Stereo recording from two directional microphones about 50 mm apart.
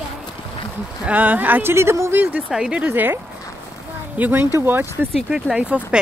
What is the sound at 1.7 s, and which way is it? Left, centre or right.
Speech, right.